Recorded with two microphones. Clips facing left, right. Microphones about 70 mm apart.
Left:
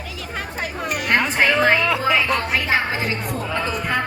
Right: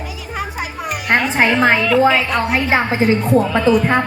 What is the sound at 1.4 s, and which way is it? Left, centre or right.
Music, right.